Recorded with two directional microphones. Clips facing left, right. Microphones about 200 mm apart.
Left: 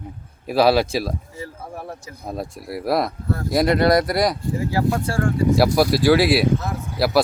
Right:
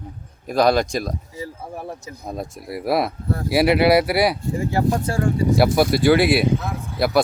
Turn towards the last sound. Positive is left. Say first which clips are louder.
# even
turn(degrees=0)  # may be behind; listen again after turning